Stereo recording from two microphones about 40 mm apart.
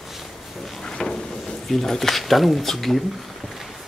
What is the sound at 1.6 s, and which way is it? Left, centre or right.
Speech, centre.